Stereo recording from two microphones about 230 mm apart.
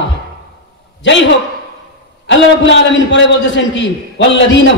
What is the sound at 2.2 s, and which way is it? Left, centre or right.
A man's voice, left.